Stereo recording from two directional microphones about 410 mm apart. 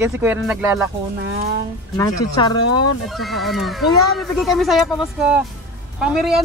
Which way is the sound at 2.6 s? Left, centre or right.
Left.